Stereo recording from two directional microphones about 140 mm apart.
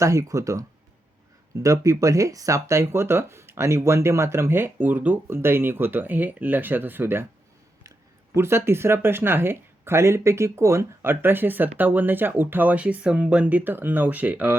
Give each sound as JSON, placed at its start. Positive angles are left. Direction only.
{"t": 0.0, "sound": "speech", "side_deg": -20}
{"t": 8.4, "sound": "speech", "side_deg": -15}